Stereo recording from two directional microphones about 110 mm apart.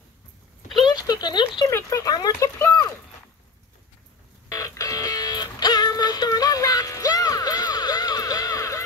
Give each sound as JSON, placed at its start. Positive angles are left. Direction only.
{"t": 0.8, "sound": "speech", "side_deg": 40}
{"t": 1.7, "sound": "speech", "side_deg": 25}
{"t": 4.5, "sound": "music", "side_deg": 30}